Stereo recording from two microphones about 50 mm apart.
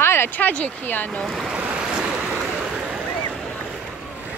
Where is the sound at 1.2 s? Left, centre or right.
Centre.